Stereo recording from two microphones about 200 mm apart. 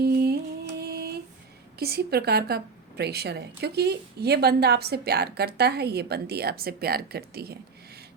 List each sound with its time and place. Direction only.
0.0 s mantra: 50° right (ahead or behind)
1.8 s a woman's voice: 50° right (ahead or behind)